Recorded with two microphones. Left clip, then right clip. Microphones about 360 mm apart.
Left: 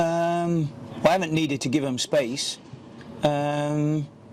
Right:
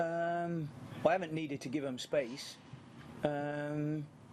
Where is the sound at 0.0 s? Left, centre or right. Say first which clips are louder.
Left 11 dB; left.